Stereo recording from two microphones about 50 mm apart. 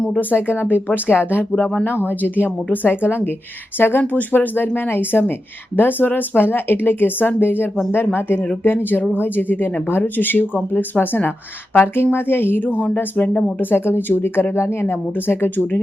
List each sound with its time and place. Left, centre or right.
0.2 s speech: left
13.6 s speech: left
14.5 s speech: left